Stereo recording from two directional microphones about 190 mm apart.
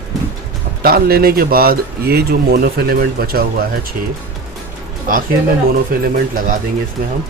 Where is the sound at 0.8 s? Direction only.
50° right (ahead or behind).